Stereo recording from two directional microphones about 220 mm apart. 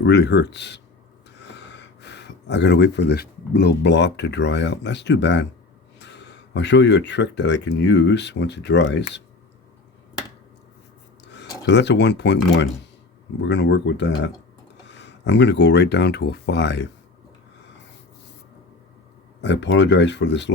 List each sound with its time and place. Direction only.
0.0 s speech: 50° left (ahead or behind)
11.6 s speech: 50° left (ahead or behind)
19.4 s speech: 55° left (ahead or behind)